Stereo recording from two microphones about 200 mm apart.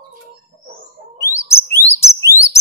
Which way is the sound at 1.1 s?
15° left (ahead or behind).